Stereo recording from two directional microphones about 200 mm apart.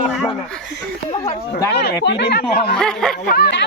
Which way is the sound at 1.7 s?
55° left (ahead or behind).